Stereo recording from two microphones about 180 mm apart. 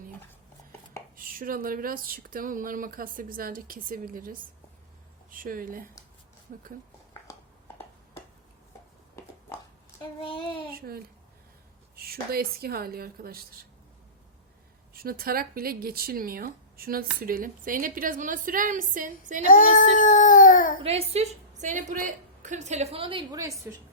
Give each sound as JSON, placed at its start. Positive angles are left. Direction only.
{"t": 1.1, "sound": "speech", "side_deg": -50}
{"t": 10.2, "sound": "child singing", "side_deg": 30}
{"t": 10.8, "sound": "speech", "side_deg": -55}
{"t": 14.9, "sound": "speech", "side_deg": -55}
{"t": 19.5, "sound": "child singing", "side_deg": 45}
{"t": 20.8, "sound": "a woman's voice", "side_deg": -35}